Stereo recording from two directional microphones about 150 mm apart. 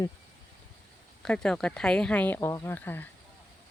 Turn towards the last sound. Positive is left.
turn(degrees=15)  # may be behind; listen again after turning